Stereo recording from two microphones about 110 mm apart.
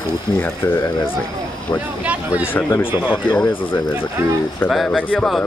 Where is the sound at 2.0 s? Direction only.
15° right (ahead or behind).